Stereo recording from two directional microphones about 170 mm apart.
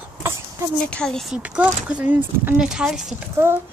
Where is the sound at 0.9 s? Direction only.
5° left (ahead or behind).